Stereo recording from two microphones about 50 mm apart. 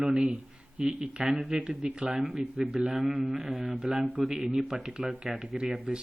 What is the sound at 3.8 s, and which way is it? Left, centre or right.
Speech, centre.